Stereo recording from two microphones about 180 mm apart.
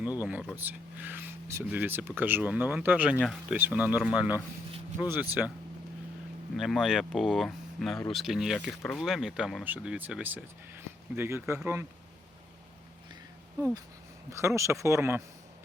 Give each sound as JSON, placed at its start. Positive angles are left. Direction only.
{"t": 0.0, "sound": "speech", "side_deg": -10}
{"t": 5.4, "sound": "speech", "side_deg": -10}
{"t": 6.6, "sound": "speech", "side_deg": 0}
{"t": 14.3, "sound": "speech", "side_deg": -15}